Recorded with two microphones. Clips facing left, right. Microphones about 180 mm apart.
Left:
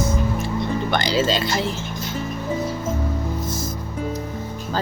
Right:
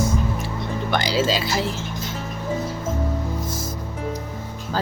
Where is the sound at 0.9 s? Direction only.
5° right (ahead or behind).